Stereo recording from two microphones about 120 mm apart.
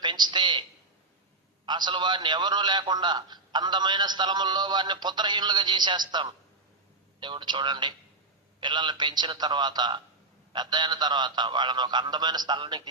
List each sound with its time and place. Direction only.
0.0 s a man's voice: 40° right (ahead or behind)
1.6 s a man's voice: 40° right (ahead or behind)